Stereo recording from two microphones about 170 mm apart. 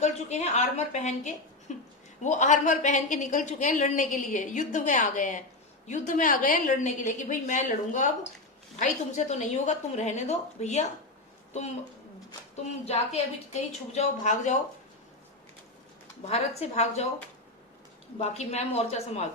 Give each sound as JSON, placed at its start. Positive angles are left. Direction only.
{"t": 0.0, "sound": "a woman's voice", "side_deg": 40}
{"t": 12.8, "sound": "a woman's voice", "side_deg": 40}
{"t": 16.2, "sound": "a woman's voice", "side_deg": 40}
{"t": 18.2, "sound": "a woman's voice", "side_deg": 40}